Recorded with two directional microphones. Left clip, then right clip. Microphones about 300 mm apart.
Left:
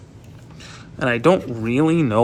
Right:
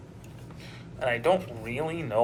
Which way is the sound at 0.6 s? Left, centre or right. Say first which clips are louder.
Left 7 dB; left.